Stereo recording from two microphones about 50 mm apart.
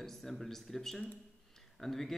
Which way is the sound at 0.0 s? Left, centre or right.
Centre.